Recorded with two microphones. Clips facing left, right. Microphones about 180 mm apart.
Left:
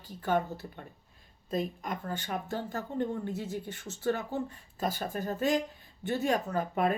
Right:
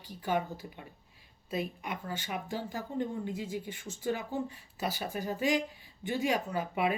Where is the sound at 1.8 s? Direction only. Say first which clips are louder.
Left 2 dB; 45° left (ahead or behind).